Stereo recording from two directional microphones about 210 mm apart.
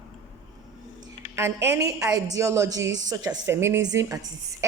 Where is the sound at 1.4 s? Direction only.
10° right (ahead or behind).